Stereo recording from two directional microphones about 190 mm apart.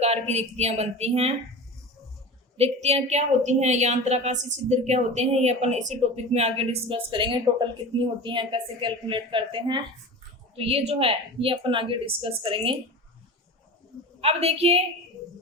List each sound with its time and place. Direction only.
0.0 s a woman's voice: 35° right (ahead or behind)
2.6 s a woman's voice: 35° right (ahead or behind)
14.2 s a woman's voice: 30° right (ahead or behind)